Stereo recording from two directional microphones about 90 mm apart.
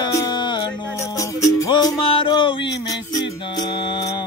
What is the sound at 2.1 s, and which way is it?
Music, 70° left (ahead or behind).